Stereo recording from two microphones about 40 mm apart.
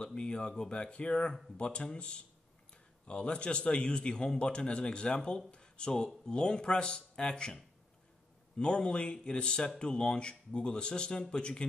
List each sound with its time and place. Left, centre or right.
0.0 s a man's voice: left
8.5 s a man's voice: left